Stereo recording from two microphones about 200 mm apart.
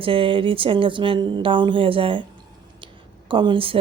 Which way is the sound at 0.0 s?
25° right (ahead or behind).